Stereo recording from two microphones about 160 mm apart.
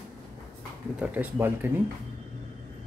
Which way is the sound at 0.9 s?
10° right (ahead or behind).